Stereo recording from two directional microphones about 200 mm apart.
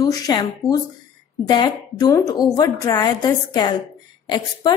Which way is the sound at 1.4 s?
20° left (ahead or behind).